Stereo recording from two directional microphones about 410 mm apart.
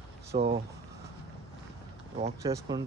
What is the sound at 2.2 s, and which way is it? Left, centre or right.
Speech, centre.